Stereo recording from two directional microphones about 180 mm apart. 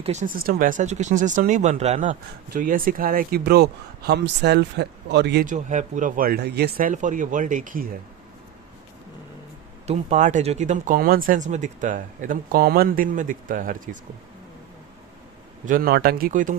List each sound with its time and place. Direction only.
0.0 s speech: 40° right (ahead or behind); by 5.5 s 65° right (ahead or behind)
5.5 s speech: 45° right (ahead or behind)
9.8 s speech: 35° right (ahead or behind)
15.6 s speech: 50° right (ahead or behind)